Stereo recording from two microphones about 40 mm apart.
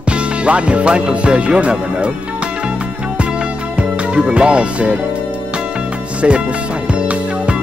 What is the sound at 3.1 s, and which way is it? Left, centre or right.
Music, right.